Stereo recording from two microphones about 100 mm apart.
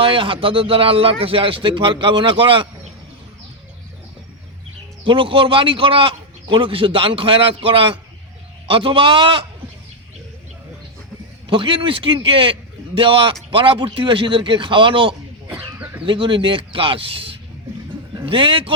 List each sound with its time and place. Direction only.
0.0 s a man's voice: 60° right (ahead or behind)
5.0 s a man's voice: 60° right (ahead or behind)
11.4 s a man's voice: 55° right (ahead or behind)